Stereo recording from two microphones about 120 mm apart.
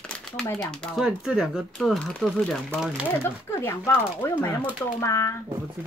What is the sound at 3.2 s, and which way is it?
Speech, 20° left (ahead or behind).